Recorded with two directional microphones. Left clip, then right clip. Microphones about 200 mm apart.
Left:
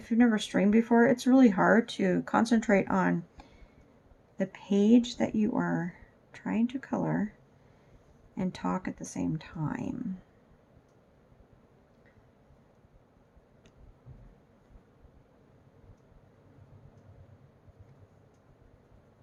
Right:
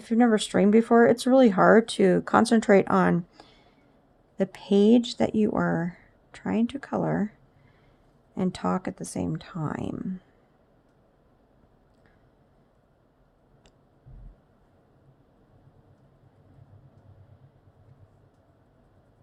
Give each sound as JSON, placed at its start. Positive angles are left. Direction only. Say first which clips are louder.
{"t": 0.0, "sound": "speech", "louder": "right 5 dB", "side_deg": -50}
{"t": 8.4, "sound": "speech", "louder": "right 5 dB", "side_deg": -50}